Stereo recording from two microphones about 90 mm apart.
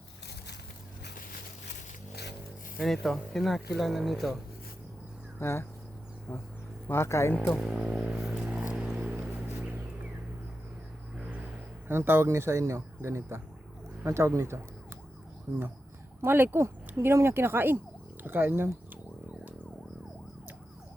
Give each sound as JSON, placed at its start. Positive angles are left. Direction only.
{"t": 2.7, "sound": "speech", "side_deg": 0}
{"t": 5.4, "sound": "speech", "side_deg": 25}
{"t": 6.8, "sound": "speech", "side_deg": 30}
{"t": 7.7, "sound": "speech", "side_deg": -5}
{"t": 8.1, "sound": "a sound", "side_deg": -5}
{"t": 11.9, "sound": "speech", "side_deg": -25}